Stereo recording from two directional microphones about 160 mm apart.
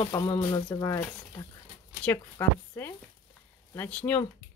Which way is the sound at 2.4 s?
15° left (ahead or behind).